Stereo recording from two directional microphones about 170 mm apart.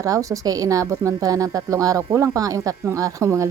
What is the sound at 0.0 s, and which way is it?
Speech, 20° right (ahead or behind).